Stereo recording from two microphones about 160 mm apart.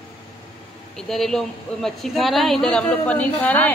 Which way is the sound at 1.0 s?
Centre (ahead or behind).